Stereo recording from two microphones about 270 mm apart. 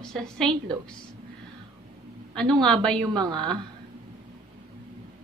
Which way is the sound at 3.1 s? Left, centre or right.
Centre.